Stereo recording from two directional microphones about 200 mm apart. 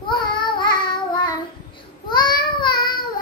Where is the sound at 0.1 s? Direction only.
25° left (ahead or behind).